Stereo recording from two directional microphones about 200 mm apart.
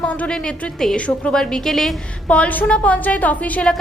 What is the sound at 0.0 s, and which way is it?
A woman's voice, 5° left (ahead or behind).